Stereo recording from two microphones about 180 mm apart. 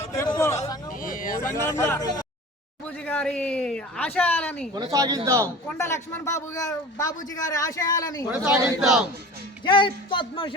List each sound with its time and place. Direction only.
0.1 s a sound: 15° left (ahead or behind)
0.9 s vehicle: 50° left (ahead or behind)
1.4 s speech: 15° left (ahead or behind)
2.8 s speech: 10° left (ahead or behind)
4.7 s a man's voice: 20° right (ahead or behind)
5.6 s a man's voice: 15° left (ahead or behind)
8.3 s speech: 5° right (ahead or behind)
9.6 s a man's voice: 25° left (ahead or behind)